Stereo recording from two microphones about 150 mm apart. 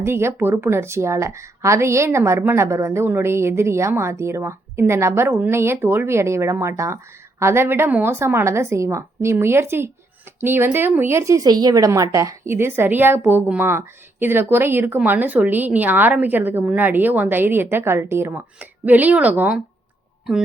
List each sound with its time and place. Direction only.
0.0 s speech: 15° right (ahead or behind)